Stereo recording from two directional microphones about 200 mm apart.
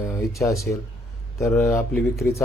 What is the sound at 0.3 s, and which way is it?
Speech, 15° left (ahead or behind).